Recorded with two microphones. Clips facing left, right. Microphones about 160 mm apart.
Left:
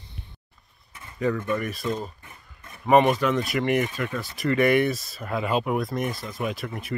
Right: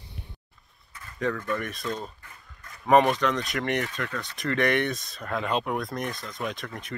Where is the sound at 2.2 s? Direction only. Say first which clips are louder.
Left 1 dB; 25° left (ahead or behind).